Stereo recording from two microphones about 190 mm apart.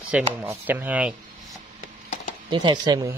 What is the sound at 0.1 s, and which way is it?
Speech, 10° right (ahead or behind).